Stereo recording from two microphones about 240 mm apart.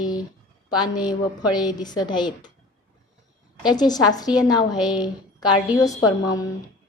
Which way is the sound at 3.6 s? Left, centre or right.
Centre.